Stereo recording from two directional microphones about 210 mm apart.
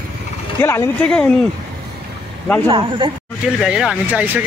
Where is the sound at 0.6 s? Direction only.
10° left (ahead or behind).